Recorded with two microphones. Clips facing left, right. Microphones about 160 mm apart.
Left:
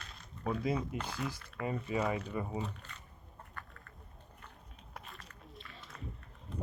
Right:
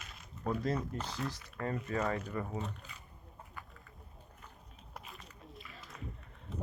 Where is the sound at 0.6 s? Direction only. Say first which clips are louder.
Left 1 dB; 5° left (ahead or behind).